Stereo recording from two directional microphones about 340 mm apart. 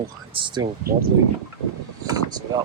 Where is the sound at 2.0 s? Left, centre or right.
Centre.